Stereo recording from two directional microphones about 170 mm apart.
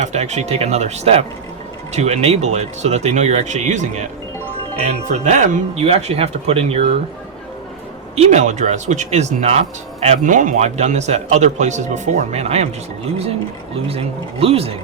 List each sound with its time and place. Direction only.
0.0 s speech: 40° right (ahead or behind)
8.1 s speech: 40° right (ahead or behind)
13.8 s speech: 35° right (ahead or behind)